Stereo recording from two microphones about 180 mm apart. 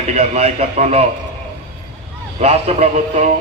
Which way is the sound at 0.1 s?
35° right (ahead or behind).